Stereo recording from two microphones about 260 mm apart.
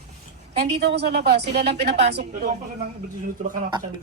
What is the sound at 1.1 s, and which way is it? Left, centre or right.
Speech, right.